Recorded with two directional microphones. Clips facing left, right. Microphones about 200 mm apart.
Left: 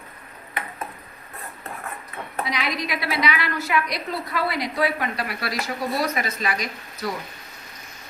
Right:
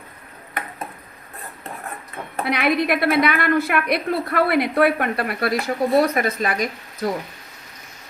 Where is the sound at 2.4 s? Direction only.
60° right (ahead or behind).